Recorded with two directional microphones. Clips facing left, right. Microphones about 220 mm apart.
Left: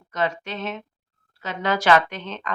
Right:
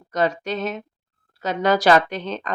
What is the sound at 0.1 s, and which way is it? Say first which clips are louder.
Speech: right 4 dB; 40° right (ahead or behind).